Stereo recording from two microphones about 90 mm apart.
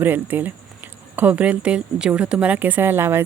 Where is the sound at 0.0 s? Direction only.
20° right (ahead or behind).